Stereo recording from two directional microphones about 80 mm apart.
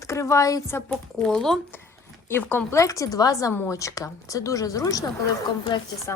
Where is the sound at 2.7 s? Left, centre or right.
Left.